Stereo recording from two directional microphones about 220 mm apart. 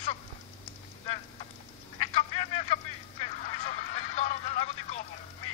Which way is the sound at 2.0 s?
25° left (ahead or behind).